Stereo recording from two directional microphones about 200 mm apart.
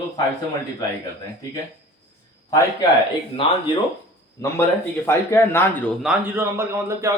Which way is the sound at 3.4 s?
25° left (ahead or behind).